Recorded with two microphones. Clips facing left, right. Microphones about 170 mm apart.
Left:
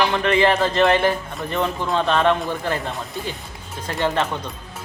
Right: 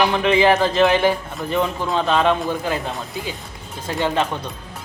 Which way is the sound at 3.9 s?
10° right (ahead or behind).